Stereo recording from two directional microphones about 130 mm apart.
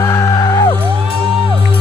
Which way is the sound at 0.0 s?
25° left (ahead or behind).